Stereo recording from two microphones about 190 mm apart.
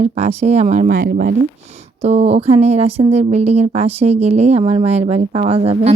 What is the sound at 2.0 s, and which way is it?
Speech, 35° right (ahead or behind).